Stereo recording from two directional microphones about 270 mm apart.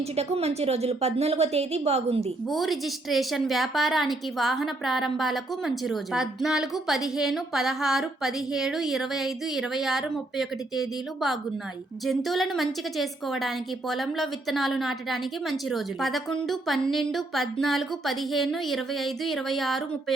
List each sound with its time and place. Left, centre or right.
0.2 s a woman's voice: right
2.5 s a woman's voice: centre